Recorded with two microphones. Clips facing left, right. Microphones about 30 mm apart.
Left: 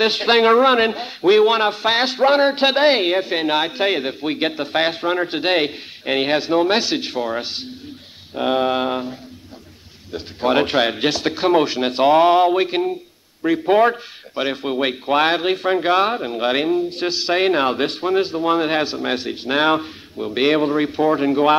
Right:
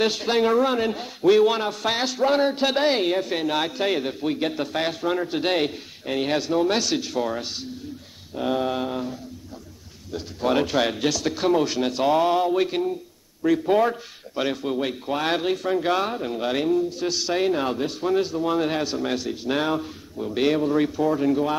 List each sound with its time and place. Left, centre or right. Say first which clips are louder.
0.0 s speech: left 6 dB; left
4.6 s speech: left 5 dB; left
6.0 s speech: left 6 dB; left
6.3 s speech: left 4 dB; left
10.1 s speech: left 4 dB; left
18.0 s speech: left 3 dB; left